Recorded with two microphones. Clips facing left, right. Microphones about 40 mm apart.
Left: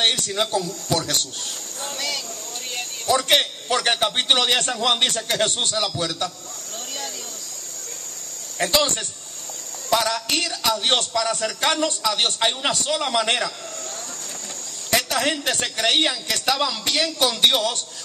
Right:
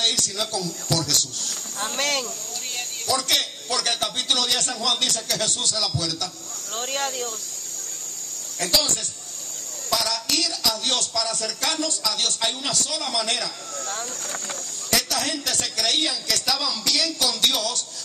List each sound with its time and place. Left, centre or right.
0.4 s a man's voice: left
1.8 s speech: right
3.1 s a man's voice: left
8.5 s a man's voice: left
14.9 s a man's voice: left